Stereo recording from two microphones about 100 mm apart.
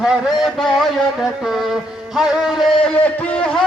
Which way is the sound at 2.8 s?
10° left (ahead or behind).